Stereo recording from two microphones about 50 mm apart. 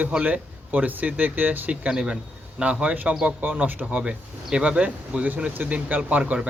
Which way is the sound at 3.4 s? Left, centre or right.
Right.